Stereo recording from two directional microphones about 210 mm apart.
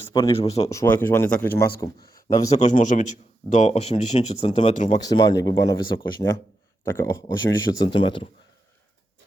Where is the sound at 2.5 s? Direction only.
35° left (ahead or behind).